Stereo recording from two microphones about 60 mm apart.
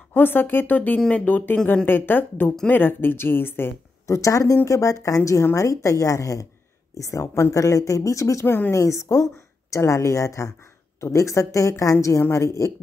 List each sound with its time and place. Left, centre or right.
0.1 s speech: left
4.1 s speech: left
8.5 s speech: left
8.7 s speech: left